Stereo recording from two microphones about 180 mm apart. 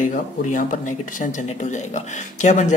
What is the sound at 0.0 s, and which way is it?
Speech, 45° left (ahead or behind).